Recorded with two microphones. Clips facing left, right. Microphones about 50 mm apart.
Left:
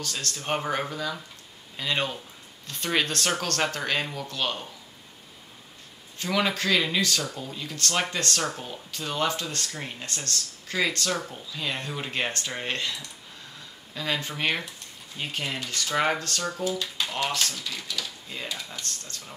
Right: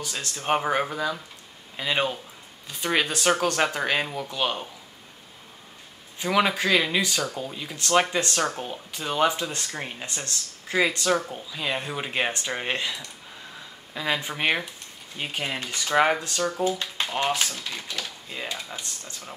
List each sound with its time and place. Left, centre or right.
0.0 s speech: centre
6.1 s speech: centre
16.6 s speech: right
17.3 s speech: centre
17.6 s speech: right
18.3 s speech: centre